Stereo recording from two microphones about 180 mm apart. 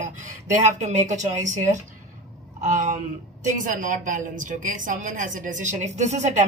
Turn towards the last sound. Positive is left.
turn(degrees=-40)  # may be behind; listen again after turning